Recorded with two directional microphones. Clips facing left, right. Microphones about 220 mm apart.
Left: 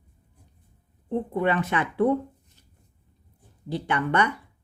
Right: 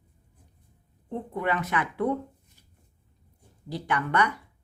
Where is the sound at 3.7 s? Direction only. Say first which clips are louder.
Left 3 dB; 25° left (ahead or behind).